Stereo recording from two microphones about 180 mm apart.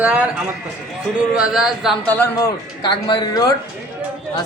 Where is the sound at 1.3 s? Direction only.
5° right (ahead or behind).